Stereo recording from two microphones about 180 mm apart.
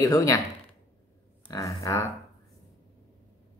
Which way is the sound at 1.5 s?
15° left (ahead or behind).